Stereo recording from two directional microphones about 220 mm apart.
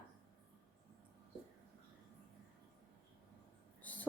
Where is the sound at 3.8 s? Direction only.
5° left (ahead or behind).